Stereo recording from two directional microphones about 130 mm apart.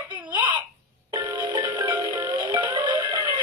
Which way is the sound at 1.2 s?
35° right (ahead or behind).